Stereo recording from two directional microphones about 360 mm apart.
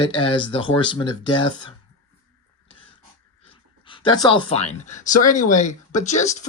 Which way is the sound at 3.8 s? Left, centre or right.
Centre.